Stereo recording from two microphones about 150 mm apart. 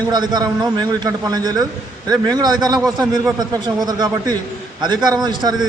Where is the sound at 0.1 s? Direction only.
25° right (ahead or behind).